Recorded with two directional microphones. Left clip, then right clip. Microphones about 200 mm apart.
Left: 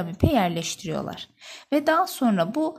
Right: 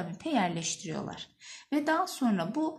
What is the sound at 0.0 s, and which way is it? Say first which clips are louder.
A woman's voice: left 8 dB; 50° left (ahead or behind).